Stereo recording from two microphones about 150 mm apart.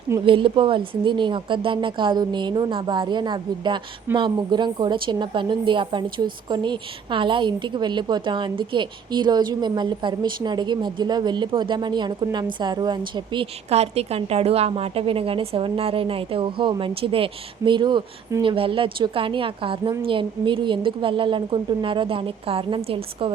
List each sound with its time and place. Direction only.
0.3 s a woman's voice: 35° right (ahead or behind)
18.4 s a woman's voice: 35° right (ahead or behind)